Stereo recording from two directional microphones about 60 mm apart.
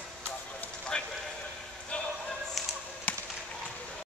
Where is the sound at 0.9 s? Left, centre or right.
Centre.